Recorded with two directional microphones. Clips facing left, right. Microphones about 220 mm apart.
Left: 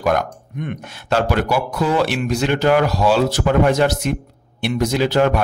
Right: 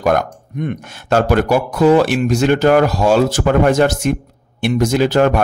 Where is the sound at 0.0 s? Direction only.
40° right (ahead or behind).